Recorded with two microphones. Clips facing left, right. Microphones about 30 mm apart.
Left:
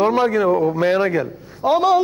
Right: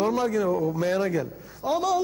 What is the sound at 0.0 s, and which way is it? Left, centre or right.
A man's voice, left.